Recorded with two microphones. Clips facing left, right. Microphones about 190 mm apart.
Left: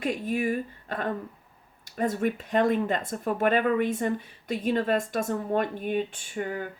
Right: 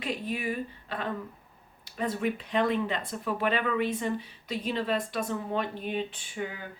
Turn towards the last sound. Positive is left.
turn(degrees=50)  # may be behind; listen again after turning